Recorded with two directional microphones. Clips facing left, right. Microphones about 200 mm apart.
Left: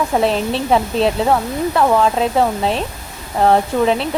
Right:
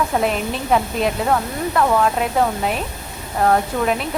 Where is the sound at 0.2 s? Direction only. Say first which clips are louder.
Left 4 dB; 30° left (ahead or behind).